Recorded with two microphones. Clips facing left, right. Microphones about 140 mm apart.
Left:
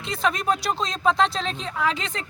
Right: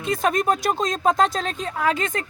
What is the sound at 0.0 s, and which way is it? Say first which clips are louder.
Speech: right 4 dB; 45° right (ahead or behind).